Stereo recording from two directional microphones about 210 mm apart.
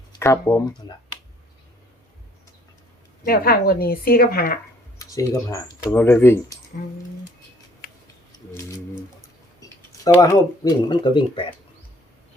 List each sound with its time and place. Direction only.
0.1 s speech: 15° left (ahead or behind)
3.2 s a woman's voice: 45° left (ahead or behind)
4.9 s speech: 15° left (ahead or behind)
9.6 s speech: 15° left (ahead or behind)